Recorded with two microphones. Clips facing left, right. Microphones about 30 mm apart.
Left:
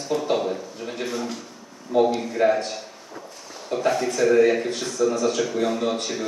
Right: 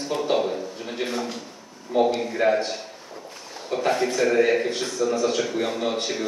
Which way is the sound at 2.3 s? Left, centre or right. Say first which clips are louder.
Left 1 dB; centre.